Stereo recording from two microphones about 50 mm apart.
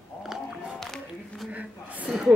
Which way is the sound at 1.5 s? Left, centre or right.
Right.